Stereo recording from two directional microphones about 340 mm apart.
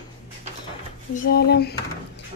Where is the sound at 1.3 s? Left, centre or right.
Left.